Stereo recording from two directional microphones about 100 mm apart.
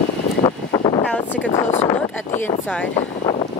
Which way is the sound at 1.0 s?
20° left (ahead or behind).